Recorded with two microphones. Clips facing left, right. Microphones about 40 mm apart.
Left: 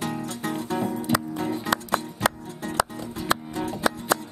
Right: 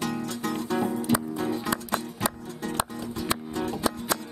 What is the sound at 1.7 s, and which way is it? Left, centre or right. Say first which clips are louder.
Music: left 4 dB; left.